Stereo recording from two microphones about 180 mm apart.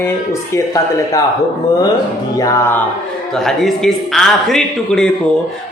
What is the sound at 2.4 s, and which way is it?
Speech, 20° left (ahead or behind).